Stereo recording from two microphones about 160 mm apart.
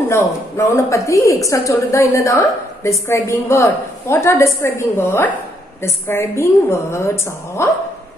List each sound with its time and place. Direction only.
0.1 s a woman's voice: 15° left (ahead or behind)